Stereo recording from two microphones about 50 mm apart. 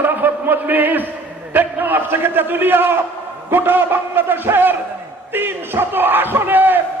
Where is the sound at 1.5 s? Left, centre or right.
Right.